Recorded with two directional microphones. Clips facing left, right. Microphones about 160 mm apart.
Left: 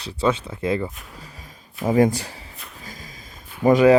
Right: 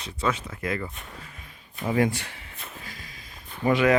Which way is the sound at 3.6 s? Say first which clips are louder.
Left 7 dB; 40° left (ahead or behind).